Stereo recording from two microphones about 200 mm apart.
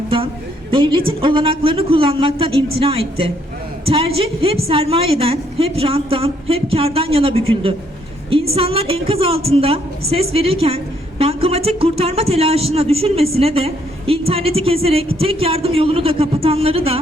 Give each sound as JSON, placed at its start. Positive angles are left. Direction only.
{"t": 0.7, "sound": "a woman's voice", "side_deg": -25}
{"t": 8.5, "sound": "a woman's voice", "side_deg": -30}